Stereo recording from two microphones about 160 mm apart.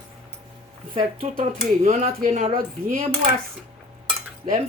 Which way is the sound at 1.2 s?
55° right (ahead or behind).